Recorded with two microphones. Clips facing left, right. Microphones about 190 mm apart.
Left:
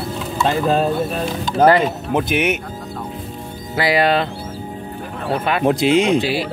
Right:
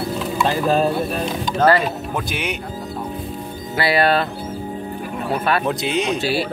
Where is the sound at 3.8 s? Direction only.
15° left (ahead or behind).